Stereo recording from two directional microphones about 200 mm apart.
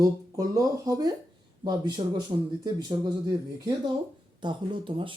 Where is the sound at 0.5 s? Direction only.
20° right (ahead or behind).